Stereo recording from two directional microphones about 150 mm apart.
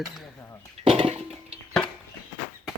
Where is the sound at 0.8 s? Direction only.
40° right (ahead or behind).